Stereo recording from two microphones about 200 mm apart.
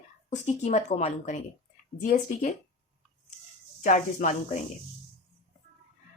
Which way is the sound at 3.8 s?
35° left (ahead or behind).